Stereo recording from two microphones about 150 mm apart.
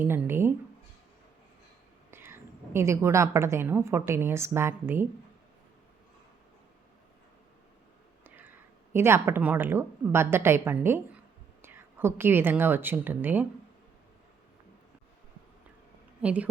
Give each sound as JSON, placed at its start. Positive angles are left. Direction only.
{"t": 0.1, "sound": "speech", "side_deg": -15}
{"t": 2.0, "sound": "a woman's voice", "side_deg": -15}
{"t": 8.2, "sound": "a woman's voice", "side_deg": -15}
{"t": 16.2, "sound": "a woman's voice", "side_deg": -10}